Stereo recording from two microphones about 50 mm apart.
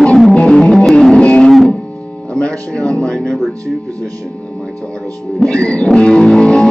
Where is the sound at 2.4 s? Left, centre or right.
Left.